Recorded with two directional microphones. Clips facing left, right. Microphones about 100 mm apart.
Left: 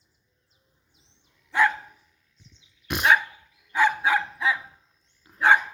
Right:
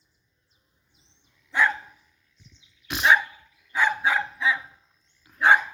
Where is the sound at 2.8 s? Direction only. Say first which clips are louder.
Even; 50° left (ahead or behind).